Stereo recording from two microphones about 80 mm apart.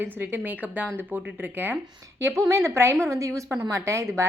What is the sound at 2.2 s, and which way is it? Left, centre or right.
A woman's voice, right.